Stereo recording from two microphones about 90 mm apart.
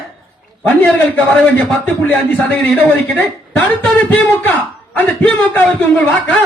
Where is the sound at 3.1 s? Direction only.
20° left (ahead or behind); by 6.4 s 5° left (ahead or behind).